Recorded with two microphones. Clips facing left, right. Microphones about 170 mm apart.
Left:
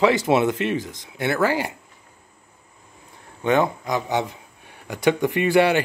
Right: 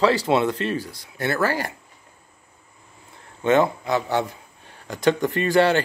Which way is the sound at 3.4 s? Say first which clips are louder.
Right 1 dB; 15° left (ahead or behind).